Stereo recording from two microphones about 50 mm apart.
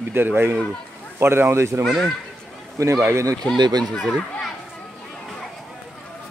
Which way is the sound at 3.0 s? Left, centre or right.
Right.